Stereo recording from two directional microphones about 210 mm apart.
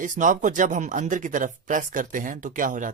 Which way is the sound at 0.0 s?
40° right (ahead or behind).